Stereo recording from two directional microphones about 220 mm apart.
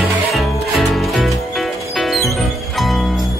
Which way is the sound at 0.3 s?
Centre (ahead or behind).